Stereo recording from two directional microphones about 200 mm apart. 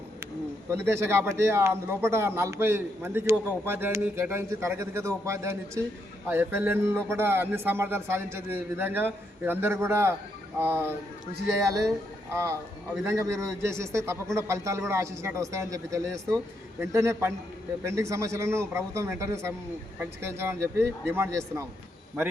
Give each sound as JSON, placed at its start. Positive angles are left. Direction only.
{"t": 0.7, "sound": "a man's voice", "side_deg": -15}
{"t": 13.6, "sound": "a man's voice", "side_deg": -15}